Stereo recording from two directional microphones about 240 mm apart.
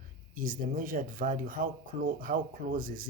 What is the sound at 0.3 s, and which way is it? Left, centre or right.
Speech, right.